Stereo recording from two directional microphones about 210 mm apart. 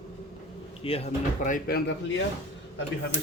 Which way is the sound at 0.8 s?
25° left (ahead or behind).